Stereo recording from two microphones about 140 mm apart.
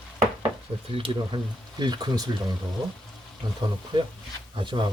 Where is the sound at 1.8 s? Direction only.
30° right (ahead or behind).